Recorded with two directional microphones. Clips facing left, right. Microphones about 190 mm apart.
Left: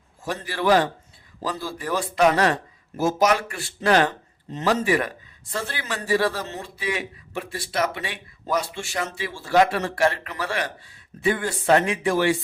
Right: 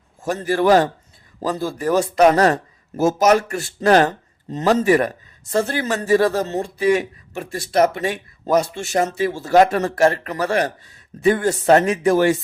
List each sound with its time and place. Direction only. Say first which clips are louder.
0.2 s speech: right 8 dB; 45° right (ahead or behind)